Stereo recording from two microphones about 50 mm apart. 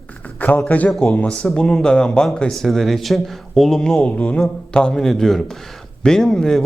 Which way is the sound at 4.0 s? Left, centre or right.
Left.